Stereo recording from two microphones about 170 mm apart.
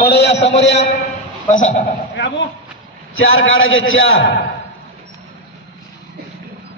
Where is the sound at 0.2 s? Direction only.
40° left (ahead or behind).